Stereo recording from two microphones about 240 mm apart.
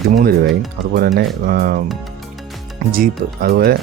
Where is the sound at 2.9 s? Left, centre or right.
Right.